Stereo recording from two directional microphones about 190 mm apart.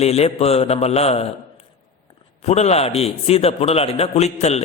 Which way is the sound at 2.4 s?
35° left (ahead or behind).